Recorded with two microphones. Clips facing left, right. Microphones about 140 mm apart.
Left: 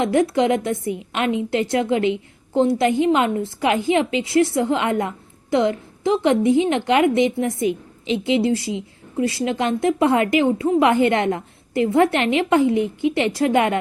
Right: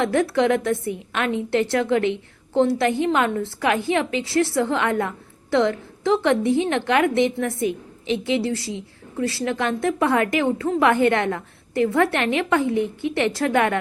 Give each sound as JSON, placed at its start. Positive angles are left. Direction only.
{"t": 0.0, "sound": "a woman's voice", "side_deg": 15}